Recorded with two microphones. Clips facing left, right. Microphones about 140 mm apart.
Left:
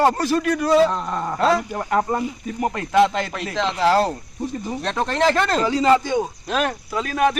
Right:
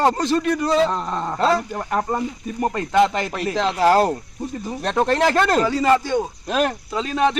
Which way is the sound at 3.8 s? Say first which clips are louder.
Right 2 dB; 45° right (ahead or behind).